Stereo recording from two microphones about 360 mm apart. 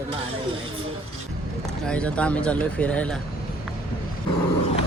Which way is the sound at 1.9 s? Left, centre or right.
Centre.